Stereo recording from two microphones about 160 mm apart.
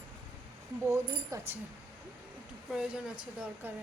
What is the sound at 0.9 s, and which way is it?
Speech, 20° right (ahead or behind).